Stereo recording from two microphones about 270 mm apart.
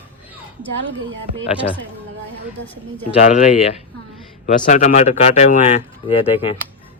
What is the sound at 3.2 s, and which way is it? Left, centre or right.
Speech, left.